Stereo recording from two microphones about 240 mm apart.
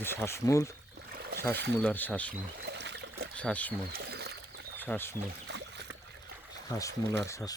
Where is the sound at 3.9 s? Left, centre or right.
Right.